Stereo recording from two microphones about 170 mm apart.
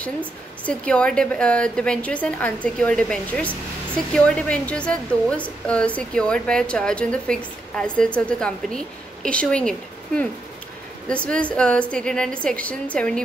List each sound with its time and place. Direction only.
0.7 s a woman's voice: 5° left (ahead or behind)